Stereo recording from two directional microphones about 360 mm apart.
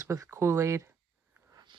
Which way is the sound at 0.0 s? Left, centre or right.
Centre.